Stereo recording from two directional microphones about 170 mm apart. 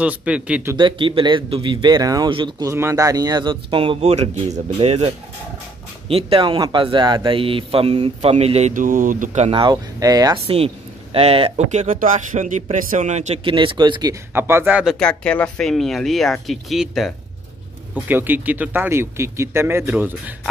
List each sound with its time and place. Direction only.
0.0 s a man's voice: 5° right (ahead or behind)
0.7 s speech: 30° right (ahead or behind); by 9.5 s 50° right (ahead or behind)
9.5 s speech: 25° right (ahead or behind)
11.1 s speech: 35° right (ahead or behind)
14.3 s a man's voice: 15° right (ahead or behind)
15.0 s speech: 5° left (ahead or behind)
17.9 s a man's voice: 10° right (ahead or behind)